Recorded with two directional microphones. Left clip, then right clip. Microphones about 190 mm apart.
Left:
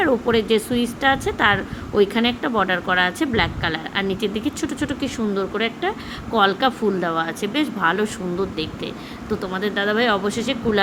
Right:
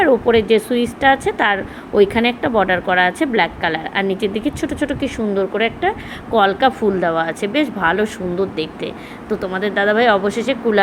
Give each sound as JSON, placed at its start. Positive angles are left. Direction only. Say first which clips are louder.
{"t": 0.0, "sound": "speech", "louder": "right 5 dB", "side_deg": 0}